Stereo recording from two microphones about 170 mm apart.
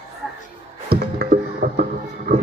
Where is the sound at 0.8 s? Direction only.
65° right (ahead or behind).